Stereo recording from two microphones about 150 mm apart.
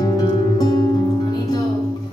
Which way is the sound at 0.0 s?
25° left (ahead or behind).